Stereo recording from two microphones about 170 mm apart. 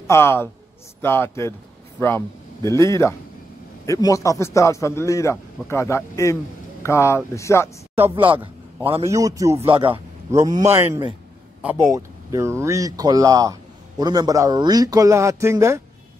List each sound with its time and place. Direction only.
0.0 s a woman's voice: 15° left (ahead or behind)
8.2 s speech: 30° right (ahead or behind)
9.0 s speech: 20° right (ahead or behind)
9.6 s speech: 30° right (ahead or behind)